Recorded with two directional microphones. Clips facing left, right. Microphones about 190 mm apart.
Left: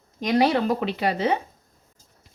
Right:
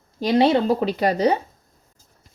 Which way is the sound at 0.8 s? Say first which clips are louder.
Right 5 dB; 40° right (ahead or behind).